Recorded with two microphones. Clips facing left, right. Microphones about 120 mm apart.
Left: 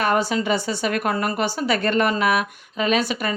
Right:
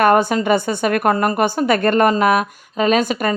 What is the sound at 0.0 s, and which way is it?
A woman's voice, 50° right (ahead or behind).